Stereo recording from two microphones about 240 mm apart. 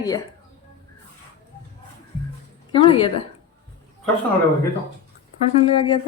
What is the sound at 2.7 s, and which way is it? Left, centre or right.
Speech, left.